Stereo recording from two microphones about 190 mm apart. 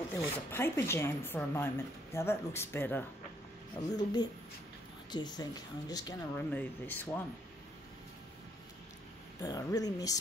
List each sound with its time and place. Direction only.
0.1 s speech: 10° left (ahead or behind)
3.9 s speech: 20° left (ahead or behind)
6.5 s speech: 10° left (ahead or behind)
9.4 s speech: 20° left (ahead or behind)